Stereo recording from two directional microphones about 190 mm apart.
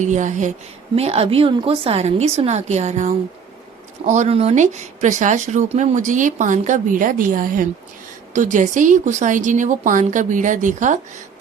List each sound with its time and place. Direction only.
0.0 s speech: 40° right (ahead or behind)